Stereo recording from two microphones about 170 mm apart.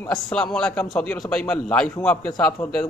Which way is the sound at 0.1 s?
5° left (ahead or behind).